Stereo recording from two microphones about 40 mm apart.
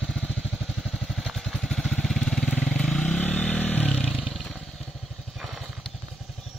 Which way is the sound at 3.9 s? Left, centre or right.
Centre.